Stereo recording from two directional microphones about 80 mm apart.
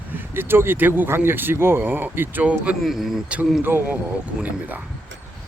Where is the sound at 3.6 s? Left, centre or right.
Right.